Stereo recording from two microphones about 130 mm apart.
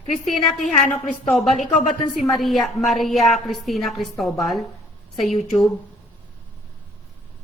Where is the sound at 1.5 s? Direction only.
70° left (ahead or behind).